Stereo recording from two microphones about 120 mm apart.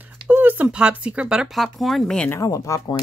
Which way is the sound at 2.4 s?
25° left (ahead or behind).